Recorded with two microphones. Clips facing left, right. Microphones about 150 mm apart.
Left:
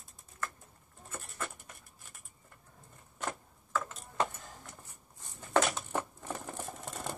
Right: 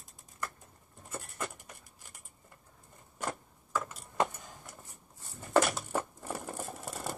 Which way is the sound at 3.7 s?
15° right (ahead or behind).